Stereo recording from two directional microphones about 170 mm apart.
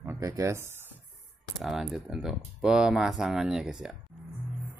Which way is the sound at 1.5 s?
Centre (ahead or behind).